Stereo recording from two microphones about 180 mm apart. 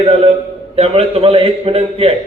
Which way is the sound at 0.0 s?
35° right (ahead or behind).